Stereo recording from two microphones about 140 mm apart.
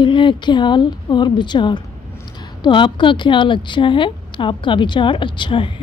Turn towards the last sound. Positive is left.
turn(degrees=35)  # may be behind; listen again after turning